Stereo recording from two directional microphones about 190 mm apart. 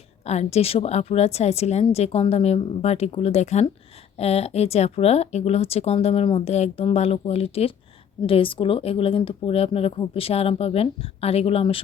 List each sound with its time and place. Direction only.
0.3 s speech: 35° left (ahead or behind)